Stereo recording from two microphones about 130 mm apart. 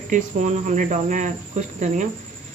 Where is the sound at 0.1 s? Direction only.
70° right (ahead or behind).